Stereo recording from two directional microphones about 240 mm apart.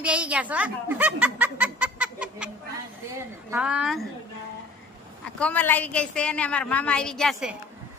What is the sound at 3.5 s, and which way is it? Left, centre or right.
Speech, centre.